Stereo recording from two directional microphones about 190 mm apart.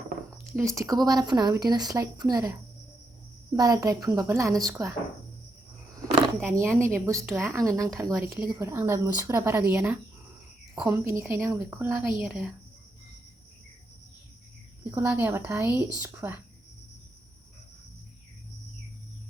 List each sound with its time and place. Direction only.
0.5 s speech: 15° right (ahead or behind)
3.5 s speech: 20° right (ahead or behind)
6.4 s speech: 15° right (ahead or behind)
14.8 s speech: 10° right (ahead or behind)